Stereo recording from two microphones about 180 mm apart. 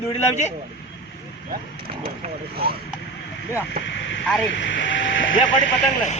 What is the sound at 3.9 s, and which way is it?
Radio, 90° left.